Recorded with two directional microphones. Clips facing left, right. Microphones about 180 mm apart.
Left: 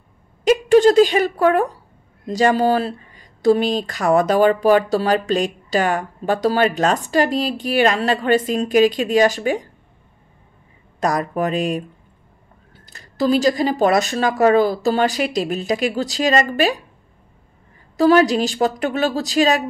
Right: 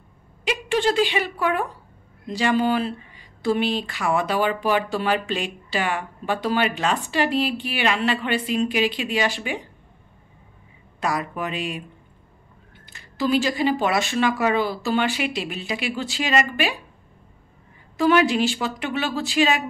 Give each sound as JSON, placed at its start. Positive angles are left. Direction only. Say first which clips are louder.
{"t": 0.5, "sound": "a woman's voice", "louder": "left 10 dB", "side_deg": 40}
{"t": 11.0, "sound": "speech", "louder": "left 6 dB", "side_deg": 40}
{"t": 17.9, "sound": "speech", "louder": "left 5 dB", "side_deg": 40}